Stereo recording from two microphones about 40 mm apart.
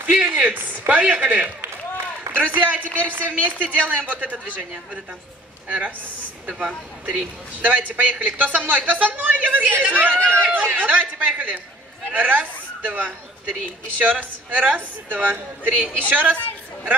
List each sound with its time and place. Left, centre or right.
0.3 s speech: right
0.6 s speech: right
2.3 s speech: right
5.7 s speech: right
15.0 s speech: right